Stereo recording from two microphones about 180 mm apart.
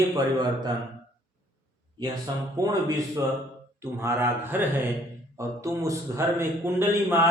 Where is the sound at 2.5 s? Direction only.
20° right (ahead or behind).